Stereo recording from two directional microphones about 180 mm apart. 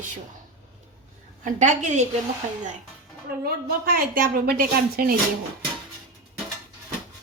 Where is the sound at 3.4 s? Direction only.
55° right (ahead or behind).